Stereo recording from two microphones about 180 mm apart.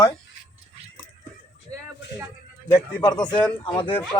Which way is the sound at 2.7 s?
20° left (ahead or behind).